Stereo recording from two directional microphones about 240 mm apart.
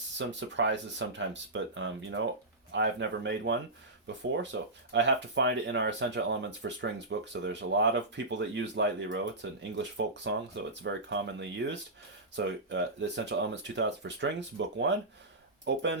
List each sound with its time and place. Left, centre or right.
0.2 s speech: right